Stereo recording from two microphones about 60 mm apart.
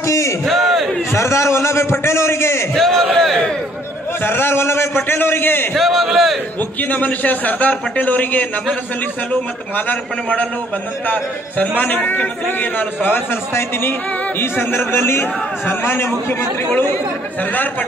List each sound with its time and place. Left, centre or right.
0.0 s battle cry: left
0.5 s battle cry: centre
1.1 s a man's voice: left
2.7 s a sound: centre
4.2 s a man's voice: left
5.8 s a man's voice: centre
6.0 s a sound: centre
6.8 s a man's voice: left